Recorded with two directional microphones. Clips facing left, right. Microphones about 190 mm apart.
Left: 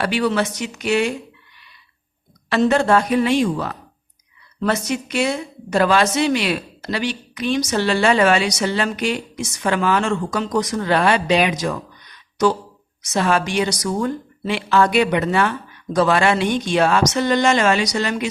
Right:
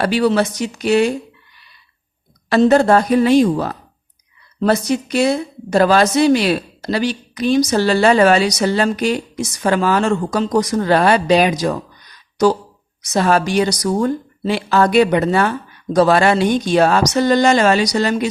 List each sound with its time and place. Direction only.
0.0 s a woman's voice: 35° right (ahead or behind)
2.5 s a woman's voice: 40° right (ahead or behind)
13.0 s a woman's voice: 40° right (ahead or behind)